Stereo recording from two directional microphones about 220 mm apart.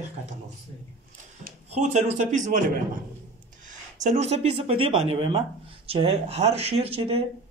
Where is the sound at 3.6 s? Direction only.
30° right (ahead or behind).